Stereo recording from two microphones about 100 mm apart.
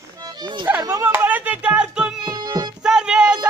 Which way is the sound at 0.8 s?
30° right (ahead or behind).